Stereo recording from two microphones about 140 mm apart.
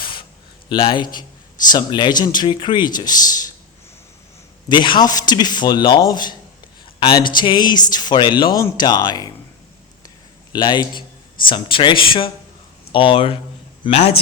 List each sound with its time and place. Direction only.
0.0 s a sound: 35° left (ahead or behind)
0.7 s a man's voice: 35° left (ahead or behind)
4.7 s a man's voice: 35° left (ahead or behind)
10.5 s a man's voice: 30° left (ahead or behind)